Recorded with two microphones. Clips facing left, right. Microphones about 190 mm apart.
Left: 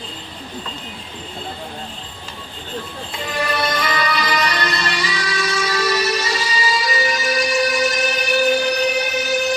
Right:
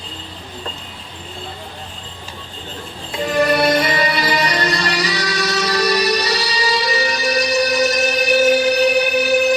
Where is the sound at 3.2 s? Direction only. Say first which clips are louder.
Right 7 dB; 40° right (ahead or behind).